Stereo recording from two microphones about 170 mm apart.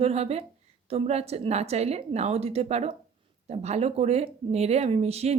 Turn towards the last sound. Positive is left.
turn(degrees=-40)  # may be behind; listen again after turning